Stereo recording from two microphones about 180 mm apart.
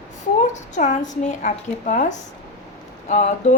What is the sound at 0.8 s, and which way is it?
A woman's voice, 45° left (ahead or behind).